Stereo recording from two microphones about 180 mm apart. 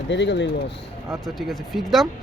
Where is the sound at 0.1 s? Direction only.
75° left (ahead or behind).